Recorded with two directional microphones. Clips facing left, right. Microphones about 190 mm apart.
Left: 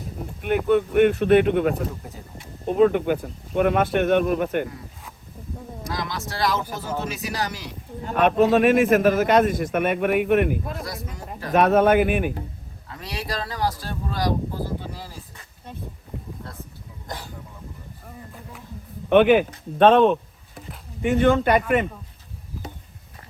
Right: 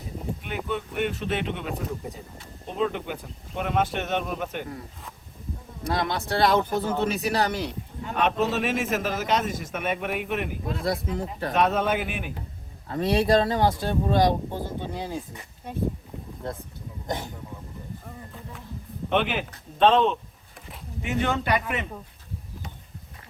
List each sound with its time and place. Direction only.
0.4 s a man's voice: 55° left (ahead or behind)
1.7 s speech: centre (ahead or behind)
2.6 s a man's voice: 55° left (ahead or behind)
6.1 s speech: 60° right (ahead or behind)
8.0 s a man's voice: 55° left (ahead or behind)
13.1 s speech: 25° right (ahead or behind)
17.1 s speech: 20° right (ahead or behind)
19.1 s a man's voice: 55° left (ahead or behind)